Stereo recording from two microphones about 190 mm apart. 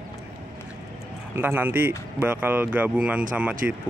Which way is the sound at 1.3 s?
10° right (ahead or behind).